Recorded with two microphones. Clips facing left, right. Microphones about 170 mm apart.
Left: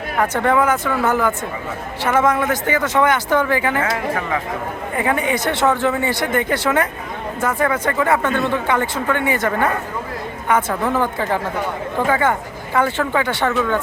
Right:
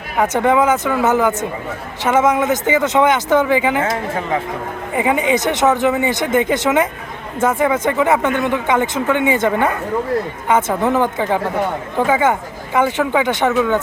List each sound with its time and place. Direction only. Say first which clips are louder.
0.2 s speech: right 3 dB; 15° right (ahead or behind)